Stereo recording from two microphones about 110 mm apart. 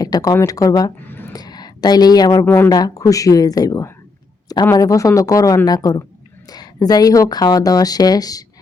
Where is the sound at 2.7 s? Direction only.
35° left (ahead or behind).